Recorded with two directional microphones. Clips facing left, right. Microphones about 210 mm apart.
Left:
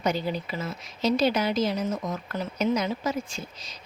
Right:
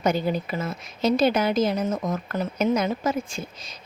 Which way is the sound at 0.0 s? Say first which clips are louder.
Right 4 dB; 50° right (ahead or behind).